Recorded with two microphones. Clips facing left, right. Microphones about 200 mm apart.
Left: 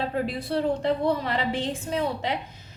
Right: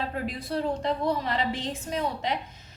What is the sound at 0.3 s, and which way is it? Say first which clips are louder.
A woman's voice: left 3 dB; 30° left (ahead or behind).